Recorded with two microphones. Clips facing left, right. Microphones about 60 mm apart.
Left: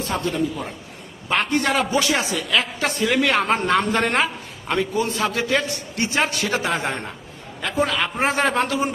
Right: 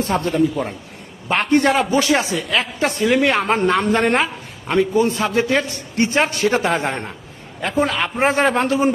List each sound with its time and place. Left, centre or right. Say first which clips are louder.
0.2 s a man's voice: right 5 dB; right
1.3 s a man's voice: right 5 dB; right